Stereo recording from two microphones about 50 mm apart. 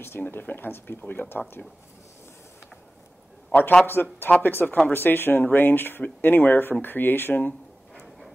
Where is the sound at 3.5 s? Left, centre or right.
Left.